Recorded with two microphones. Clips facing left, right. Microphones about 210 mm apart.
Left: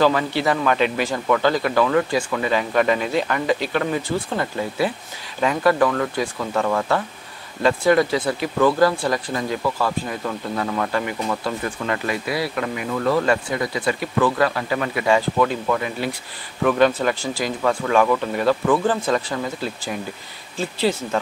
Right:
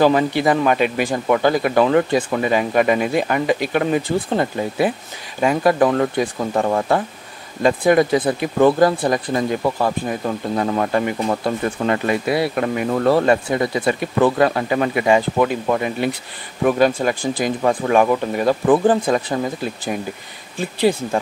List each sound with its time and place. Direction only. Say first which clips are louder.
0.0 s speech: right 3 dB; 15° right (ahead or behind)
1.9 s speech: right 3 dB; 25° right (ahead or behind)
7.6 s speech: right 2 dB; 15° right (ahead or behind)
12.7 s speech: right 5 dB; 40° right (ahead or behind)
13.2 s speech: right 4 dB; 25° right (ahead or behind)
16.6 s speech: right 1 dB; 10° right (ahead or behind)
20.5 s speech: right 4 dB; 15° right (ahead or behind)